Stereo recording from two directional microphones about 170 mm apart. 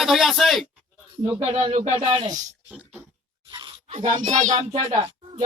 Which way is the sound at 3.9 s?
40° right (ahead or behind).